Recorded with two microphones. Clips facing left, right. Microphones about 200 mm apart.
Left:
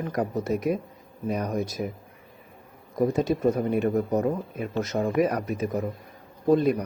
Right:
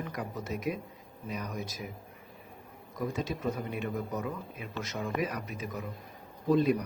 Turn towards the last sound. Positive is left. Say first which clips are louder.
# left 5 dB
turn(degrees=50)  # may be behind; listen again after turning